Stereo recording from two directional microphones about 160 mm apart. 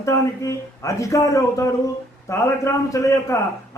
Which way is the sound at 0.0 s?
20° left (ahead or behind).